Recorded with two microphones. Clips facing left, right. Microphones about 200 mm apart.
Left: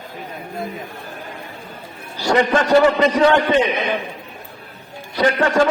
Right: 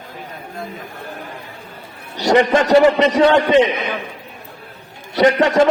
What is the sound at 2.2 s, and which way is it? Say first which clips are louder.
A man's voice: right 3 dB; 20° right (ahead or behind).